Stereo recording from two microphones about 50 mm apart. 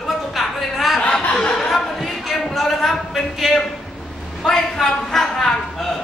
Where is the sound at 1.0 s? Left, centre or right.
Left.